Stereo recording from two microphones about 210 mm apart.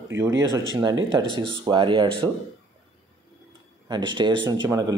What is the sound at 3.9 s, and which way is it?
Speech, 20° right (ahead or behind).